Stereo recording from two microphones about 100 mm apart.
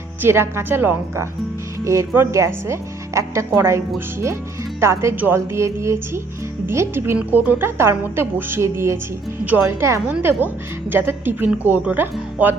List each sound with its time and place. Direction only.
0.2 s speech: 25° right (ahead or behind)